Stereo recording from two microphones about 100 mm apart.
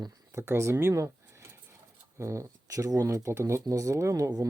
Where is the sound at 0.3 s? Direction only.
25° right (ahead or behind).